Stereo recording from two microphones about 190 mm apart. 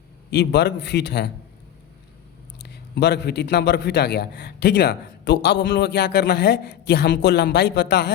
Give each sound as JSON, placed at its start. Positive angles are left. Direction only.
{"t": 0.3, "sound": "a man's voice", "side_deg": 60}
{"t": 2.6, "sound": "a man's voice", "side_deg": 60}